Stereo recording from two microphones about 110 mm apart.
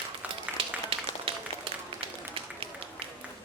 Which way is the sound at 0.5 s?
55° right (ahead or behind).